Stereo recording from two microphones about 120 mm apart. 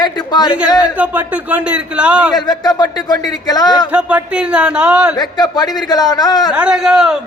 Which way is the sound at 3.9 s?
10° right (ahead or behind).